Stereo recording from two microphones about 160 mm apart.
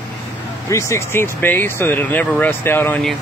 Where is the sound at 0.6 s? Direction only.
20° left (ahead or behind).